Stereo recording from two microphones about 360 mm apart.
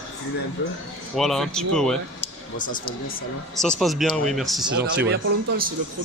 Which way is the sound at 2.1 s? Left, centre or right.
Left.